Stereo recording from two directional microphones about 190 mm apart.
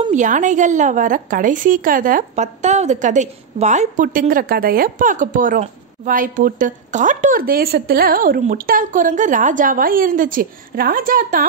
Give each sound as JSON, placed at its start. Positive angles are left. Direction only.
{"t": 0.1, "sound": "a woman's voice", "side_deg": -40}